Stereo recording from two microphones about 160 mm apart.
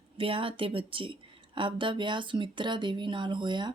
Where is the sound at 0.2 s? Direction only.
35° right (ahead or behind).